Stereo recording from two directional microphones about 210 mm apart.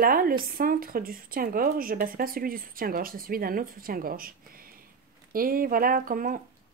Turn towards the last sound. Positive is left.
turn(degrees=-40)  # may be behind; listen again after turning